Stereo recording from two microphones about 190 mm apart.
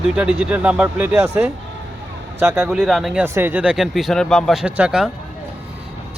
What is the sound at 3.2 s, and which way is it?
Speech, 10° right (ahead or behind).